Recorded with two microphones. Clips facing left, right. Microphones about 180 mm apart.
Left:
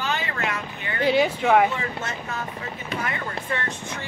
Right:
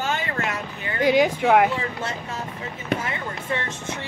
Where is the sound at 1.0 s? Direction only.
15° right (ahead or behind).